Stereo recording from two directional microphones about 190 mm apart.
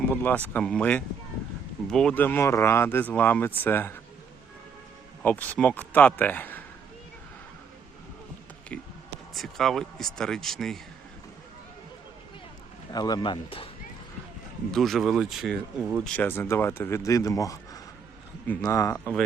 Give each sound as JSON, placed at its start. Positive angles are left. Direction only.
{"t": 0.1, "sound": "speech", "side_deg": 10}
{"t": 5.2, "sound": "speech", "side_deg": 10}
{"t": 8.7, "sound": "speech", "side_deg": 5}
{"t": 12.9, "sound": "speech", "side_deg": 20}
{"t": 14.7, "sound": "speech", "side_deg": 0}